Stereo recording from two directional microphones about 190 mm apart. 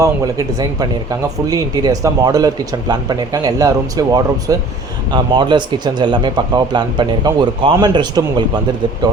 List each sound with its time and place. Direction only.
0.0 s speech: 20° right (ahead or behind)